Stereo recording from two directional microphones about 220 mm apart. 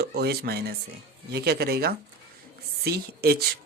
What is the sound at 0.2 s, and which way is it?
Speech, 45° right (ahead or behind).